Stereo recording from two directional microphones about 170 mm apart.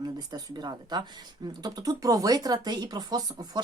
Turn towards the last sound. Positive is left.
turn(degrees=-25)  # may be behind; listen again after turning